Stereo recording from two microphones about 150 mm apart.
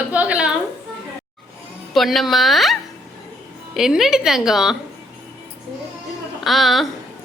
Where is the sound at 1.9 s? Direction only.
Centre (ahead or behind).